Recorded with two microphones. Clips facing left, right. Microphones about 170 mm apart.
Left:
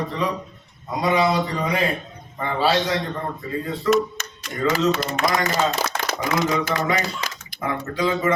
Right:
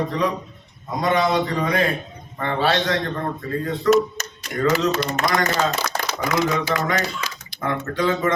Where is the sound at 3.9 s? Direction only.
40° right (ahead or behind).